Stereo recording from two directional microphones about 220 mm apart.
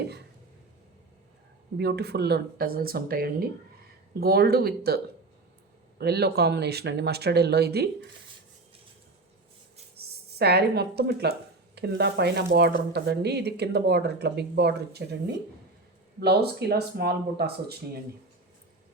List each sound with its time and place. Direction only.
1.8 s speech: 45° right (ahead or behind)
6.0 s speech: 45° right (ahead or behind)
10.0 s speech: 45° right (ahead or behind)